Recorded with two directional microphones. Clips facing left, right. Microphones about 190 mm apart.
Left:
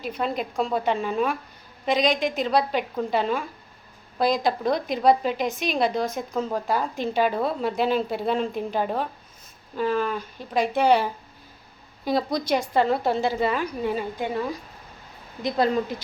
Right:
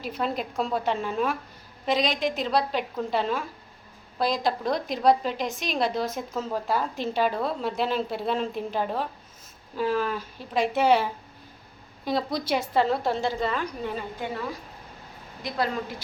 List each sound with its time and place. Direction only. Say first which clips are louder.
0.0 s a woman's voice: left 2 dB; centre (ahead or behind)
15.4 s speech: left 6 dB; 20° left (ahead or behind)